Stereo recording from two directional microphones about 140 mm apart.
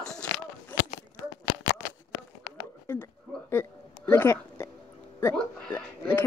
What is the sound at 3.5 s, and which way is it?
Hiccup, 15° left (ahead or behind).